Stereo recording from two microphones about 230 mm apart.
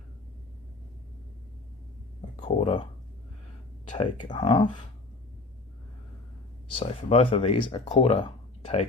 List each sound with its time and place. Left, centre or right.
2.3 s speech: left
4.3 s speech: left
6.7 s speech: left